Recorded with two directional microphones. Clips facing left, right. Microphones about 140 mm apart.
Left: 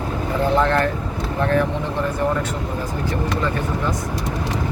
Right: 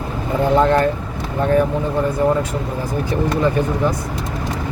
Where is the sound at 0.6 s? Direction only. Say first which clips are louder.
Right 4 dB; 15° right (ahead or behind).